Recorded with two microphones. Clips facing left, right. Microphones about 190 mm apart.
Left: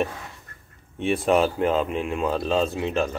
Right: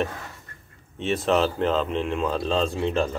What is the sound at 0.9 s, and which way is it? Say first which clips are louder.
Speech: left 2 dB; 10° left (ahead or behind).